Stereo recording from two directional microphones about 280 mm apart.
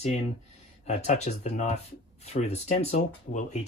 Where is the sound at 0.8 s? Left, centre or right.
Left.